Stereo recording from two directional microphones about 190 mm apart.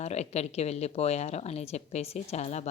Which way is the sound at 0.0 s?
35° left (ahead or behind).